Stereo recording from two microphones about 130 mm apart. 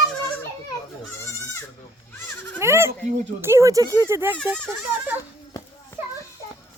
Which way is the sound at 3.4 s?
20° right (ahead or behind).